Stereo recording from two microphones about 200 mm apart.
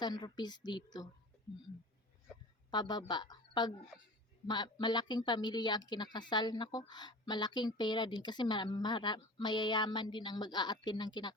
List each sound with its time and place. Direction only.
0.0 s a woman's voice: 20° left (ahead or behind)
2.6 s a woman's voice: 20° left (ahead or behind)